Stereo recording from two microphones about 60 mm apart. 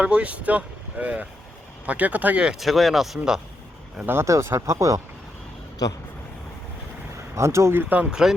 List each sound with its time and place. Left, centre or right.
0.0 s speech: right
2.6 s speech: centre
4.0 s speech: right
7.3 s speech: right
7.8 s speech: right